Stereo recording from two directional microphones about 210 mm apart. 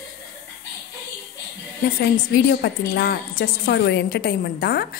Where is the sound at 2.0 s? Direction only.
50° left (ahead or behind).